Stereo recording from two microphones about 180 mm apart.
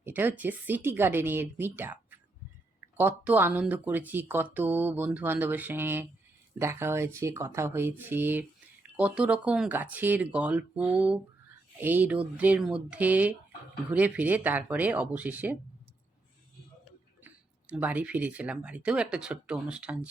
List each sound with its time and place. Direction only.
0.0 s speech: 10° right (ahead or behind)
17.7 s speech: 10° right (ahead or behind)